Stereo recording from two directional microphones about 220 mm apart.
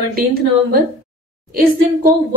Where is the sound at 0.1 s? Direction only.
40° right (ahead or behind).